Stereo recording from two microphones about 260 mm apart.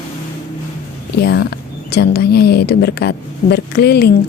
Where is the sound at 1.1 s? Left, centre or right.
Left.